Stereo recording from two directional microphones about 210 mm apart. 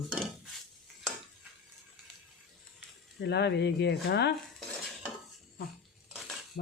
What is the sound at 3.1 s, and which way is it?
Speech, 55° left (ahead or behind).